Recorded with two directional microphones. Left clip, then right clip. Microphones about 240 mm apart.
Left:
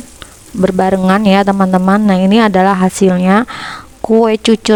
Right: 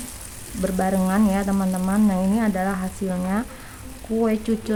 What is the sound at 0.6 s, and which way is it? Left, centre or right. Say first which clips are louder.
A woman's voice: left 11 dB; left.